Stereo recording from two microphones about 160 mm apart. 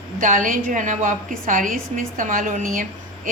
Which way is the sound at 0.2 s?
55° right (ahead or behind).